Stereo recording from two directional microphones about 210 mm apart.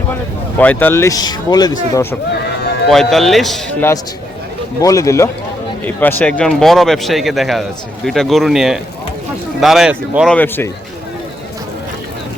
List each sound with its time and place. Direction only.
0.6 s speech: 10° left (ahead or behind)
2.9 s speech: centre (ahead or behind)
4.8 s speech: 15° left (ahead or behind); by 10.3 s 5° right (ahead or behind)
10.3 s speech: 10° left (ahead or behind)